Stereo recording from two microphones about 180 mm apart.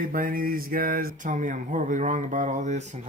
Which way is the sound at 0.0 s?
50° right (ahead or behind).